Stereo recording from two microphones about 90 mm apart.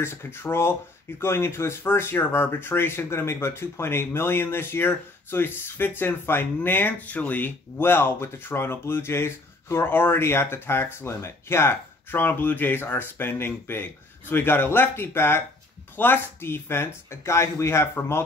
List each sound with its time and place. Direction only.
0.0 s speech: 30° left (ahead or behind)